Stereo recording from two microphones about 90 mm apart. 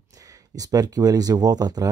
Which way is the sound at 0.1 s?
40° right (ahead or behind).